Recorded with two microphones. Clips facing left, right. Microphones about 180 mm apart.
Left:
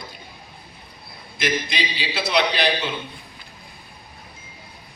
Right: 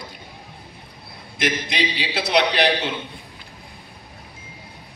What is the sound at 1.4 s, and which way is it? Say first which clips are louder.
A man's voice: right 1 dB; 65° right (ahead or behind).